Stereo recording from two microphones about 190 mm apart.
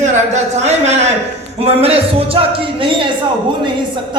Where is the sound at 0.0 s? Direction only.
35° right (ahead or behind).